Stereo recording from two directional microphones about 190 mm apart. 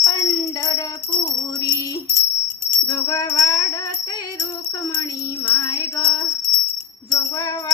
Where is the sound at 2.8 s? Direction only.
20° left (ahead or behind).